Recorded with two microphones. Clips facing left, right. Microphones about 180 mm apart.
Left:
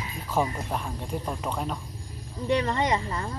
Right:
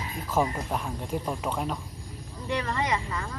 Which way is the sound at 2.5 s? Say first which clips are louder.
Left 2 dB; 30° left (ahead or behind).